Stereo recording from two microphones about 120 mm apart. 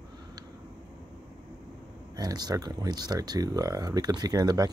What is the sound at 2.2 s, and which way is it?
Speech, 35° right (ahead or behind).